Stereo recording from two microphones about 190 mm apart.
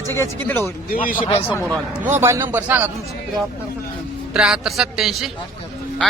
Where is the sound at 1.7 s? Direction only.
10° right (ahead or behind).